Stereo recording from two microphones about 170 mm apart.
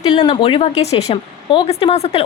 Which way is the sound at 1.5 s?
30° left (ahead or behind).